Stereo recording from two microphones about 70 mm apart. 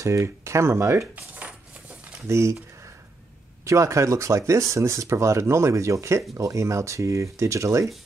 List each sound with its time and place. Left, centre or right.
0.0 s speech: right
2.2 s speech: right
3.6 s speech: right